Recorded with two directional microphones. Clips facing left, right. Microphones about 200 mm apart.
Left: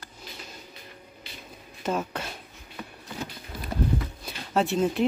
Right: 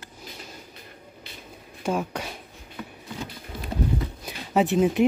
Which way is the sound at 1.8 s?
10° right (ahead or behind).